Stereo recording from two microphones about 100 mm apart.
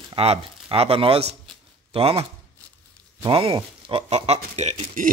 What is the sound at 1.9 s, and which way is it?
Speech, 75° right (ahead or behind).